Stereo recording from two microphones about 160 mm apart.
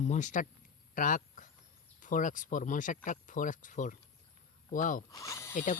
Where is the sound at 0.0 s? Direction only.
50° left (ahead or behind).